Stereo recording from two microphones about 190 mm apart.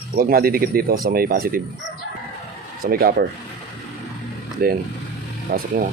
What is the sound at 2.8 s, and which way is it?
Speech, 50° right (ahead or behind).